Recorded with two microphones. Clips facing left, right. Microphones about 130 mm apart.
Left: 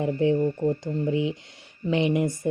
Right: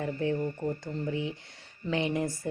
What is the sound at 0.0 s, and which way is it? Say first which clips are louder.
Speech: left 8 dB; 20° left (ahead or behind).